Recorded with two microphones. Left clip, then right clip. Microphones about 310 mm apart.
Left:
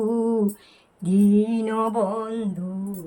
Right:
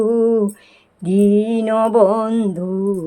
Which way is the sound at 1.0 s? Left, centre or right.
Centre.